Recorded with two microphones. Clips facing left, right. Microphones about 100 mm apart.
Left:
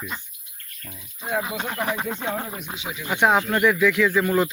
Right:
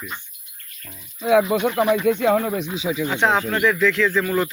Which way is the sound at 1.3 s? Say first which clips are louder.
Right 10 dB; 80° right.